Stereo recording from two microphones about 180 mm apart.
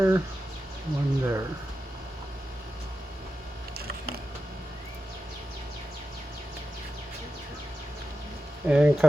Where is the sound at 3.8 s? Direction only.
60° right (ahead or behind).